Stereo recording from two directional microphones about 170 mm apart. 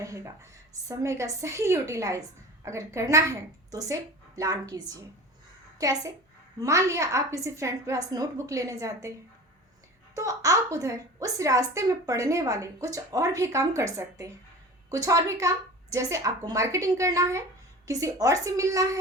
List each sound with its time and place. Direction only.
0.0 s a woman's voice: 20° right (ahead or behind)
10.2 s a woman's voice: 20° right (ahead or behind)